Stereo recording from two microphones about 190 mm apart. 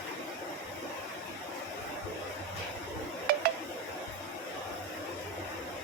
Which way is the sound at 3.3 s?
50° right (ahead or behind).